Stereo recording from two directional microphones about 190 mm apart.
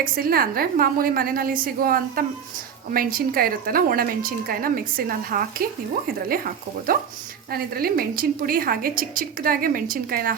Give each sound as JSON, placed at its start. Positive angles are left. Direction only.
{"t": 0.0, "sound": "a woman's voice", "side_deg": -50}